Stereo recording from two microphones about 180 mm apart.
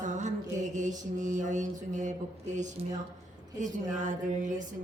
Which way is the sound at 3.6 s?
45° right (ahead or behind).